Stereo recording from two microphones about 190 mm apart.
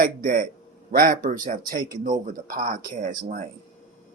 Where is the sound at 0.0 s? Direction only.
45° right (ahead or behind).